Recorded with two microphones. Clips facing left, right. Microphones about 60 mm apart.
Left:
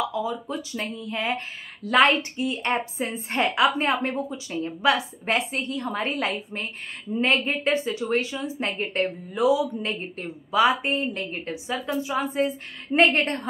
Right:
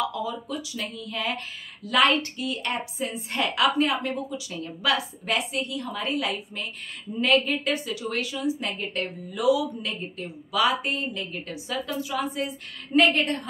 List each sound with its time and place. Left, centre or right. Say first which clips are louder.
0.1 s a woman's voice: left 2 dB; left